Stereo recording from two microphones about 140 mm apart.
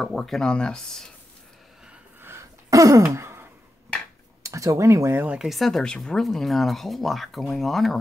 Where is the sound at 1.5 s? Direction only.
Centre (ahead or behind).